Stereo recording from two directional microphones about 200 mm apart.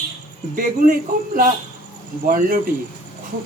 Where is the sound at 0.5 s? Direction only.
45° right (ahead or behind).